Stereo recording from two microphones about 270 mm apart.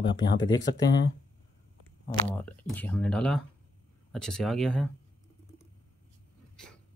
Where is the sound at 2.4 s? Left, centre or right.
Centre.